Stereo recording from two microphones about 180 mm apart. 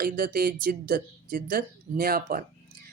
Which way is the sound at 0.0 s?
55° right (ahead or behind).